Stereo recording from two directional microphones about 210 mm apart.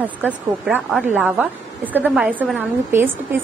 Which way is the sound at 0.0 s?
5° right (ahead or behind).